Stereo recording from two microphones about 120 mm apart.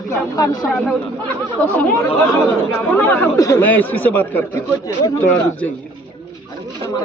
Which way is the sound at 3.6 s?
15° left (ahead or behind).